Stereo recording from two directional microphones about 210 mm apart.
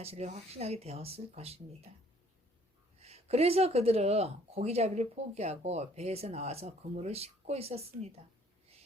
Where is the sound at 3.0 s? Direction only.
30° right (ahead or behind).